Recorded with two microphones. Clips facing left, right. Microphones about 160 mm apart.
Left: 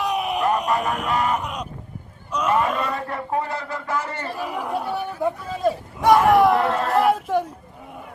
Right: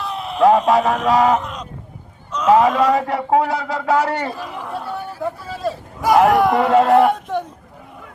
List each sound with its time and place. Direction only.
0.0 s a sound: 15° left (ahead or behind)
0.4 s a man's voice: 90° right
1.4 s speech: 10° left (ahead or behind)
2.5 s a man's voice: 90° right
4.4 s speech: 10° left (ahead or behind)
6.2 s speech: centre (ahead or behind)